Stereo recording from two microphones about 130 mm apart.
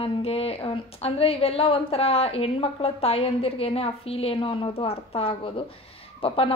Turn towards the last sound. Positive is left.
turn(degrees=45)  # may be behind; listen again after turning